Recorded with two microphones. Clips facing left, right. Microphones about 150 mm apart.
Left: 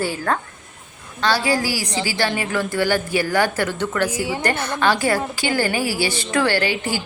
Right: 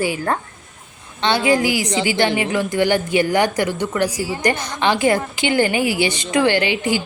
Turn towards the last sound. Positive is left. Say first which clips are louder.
# right 3 dB
turn(degrees=-20)  # may be behind; listen again after turning